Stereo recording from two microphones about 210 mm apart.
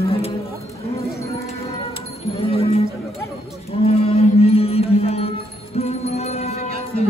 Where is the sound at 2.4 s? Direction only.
30° left (ahead or behind).